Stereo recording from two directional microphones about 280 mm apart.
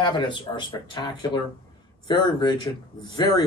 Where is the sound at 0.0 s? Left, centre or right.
Centre.